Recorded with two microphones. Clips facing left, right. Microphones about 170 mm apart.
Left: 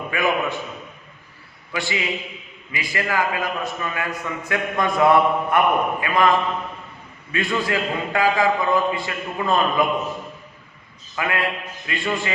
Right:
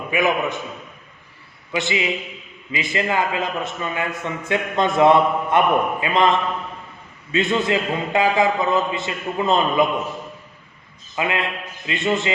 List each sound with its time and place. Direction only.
0.1 s a man's voice: 20° right (ahead or behind)
1.7 s a man's voice: 20° right (ahead or behind)
7.3 s a man's voice: 20° right (ahead or behind)
11.1 s a man's voice: 20° right (ahead or behind)